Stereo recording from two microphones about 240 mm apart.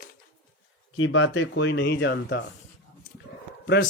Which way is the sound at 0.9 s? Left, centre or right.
Left.